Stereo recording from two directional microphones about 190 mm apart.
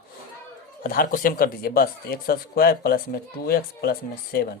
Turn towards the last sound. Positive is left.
turn(degrees=50)  # may be behind; listen again after turning